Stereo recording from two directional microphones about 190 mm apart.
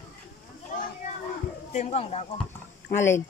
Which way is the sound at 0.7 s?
40° left (ahead or behind).